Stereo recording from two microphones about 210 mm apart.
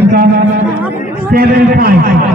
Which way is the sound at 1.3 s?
45° right (ahead or behind).